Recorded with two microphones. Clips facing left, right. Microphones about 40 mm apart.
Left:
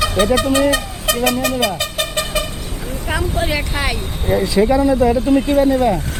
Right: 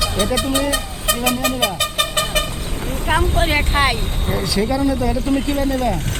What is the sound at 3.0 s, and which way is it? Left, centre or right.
Speech, right.